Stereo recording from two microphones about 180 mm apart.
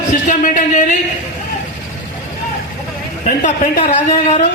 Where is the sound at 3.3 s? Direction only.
45° left (ahead or behind).